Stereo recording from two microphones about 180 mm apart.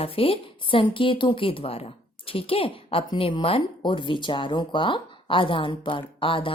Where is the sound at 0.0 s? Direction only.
30° left (ahead or behind).